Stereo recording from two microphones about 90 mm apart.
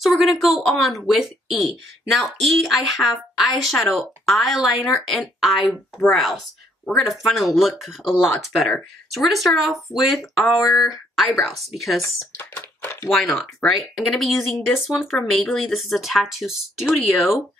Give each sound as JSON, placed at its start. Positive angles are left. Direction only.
{"t": 0.0, "sound": "a woman's voice", "side_deg": 0}
{"t": 12.0, "sound": "speech", "side_deg": 25}
{"t": 13.1, "sound": "speech", "side_deg": 0}